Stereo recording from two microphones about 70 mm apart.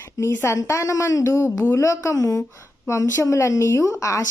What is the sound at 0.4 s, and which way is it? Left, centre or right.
A woman's voice, left.